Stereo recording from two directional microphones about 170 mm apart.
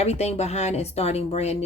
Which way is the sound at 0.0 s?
40° left (ahead or behind).